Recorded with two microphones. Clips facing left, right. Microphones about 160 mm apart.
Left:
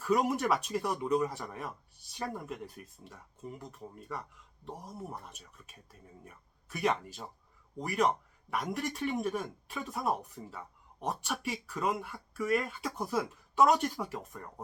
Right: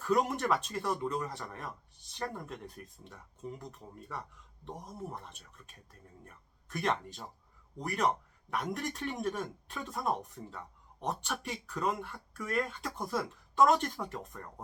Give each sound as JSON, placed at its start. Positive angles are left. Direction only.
{"t": 0.0, "sound": "speech", "side_deg": 10}